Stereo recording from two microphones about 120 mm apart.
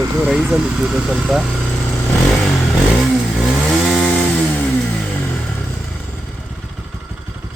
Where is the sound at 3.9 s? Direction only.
5° left (ahead or behind).